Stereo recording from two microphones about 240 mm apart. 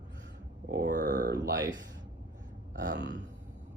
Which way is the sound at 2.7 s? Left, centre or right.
Right.